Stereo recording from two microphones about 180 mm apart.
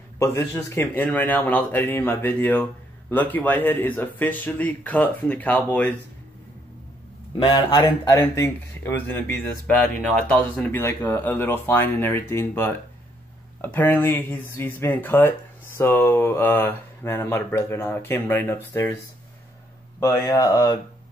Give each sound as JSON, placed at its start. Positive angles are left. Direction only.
{"t": 0.2, "sound": "speech", "side_deg": 15}
{"t": 7.3, "sound": "speech", "side_deg": 20}
{"t": 10.1, "sound": "speech", "side_deg": 10}
{"t": 20.0, "sound": "speech", "side_deg": 15}